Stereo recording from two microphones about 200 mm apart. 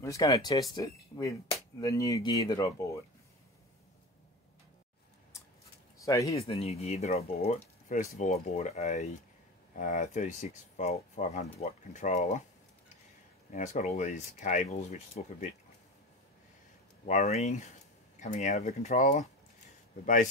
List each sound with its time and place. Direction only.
0.0 s speech: 15° left (ahead or behind)
6.0 s speech: 15° left (ahead or behind)
6.3 s speech: 30° left (ahead or behind)
13.5 s speech: 40° left (ahead or behind)
17.0 s speech: 35° left (ahead or behind)